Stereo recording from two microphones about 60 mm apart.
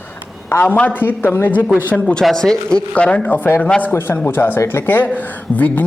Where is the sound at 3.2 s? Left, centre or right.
Left.